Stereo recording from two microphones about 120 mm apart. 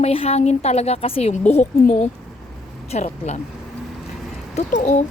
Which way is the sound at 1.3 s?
75° left (ahead or behind).